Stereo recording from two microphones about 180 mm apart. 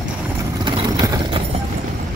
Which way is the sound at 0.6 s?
25° right (ahead or behind).